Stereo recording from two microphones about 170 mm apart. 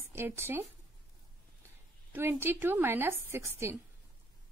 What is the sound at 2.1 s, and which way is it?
A woman's voice, 15° right (ahead or behind).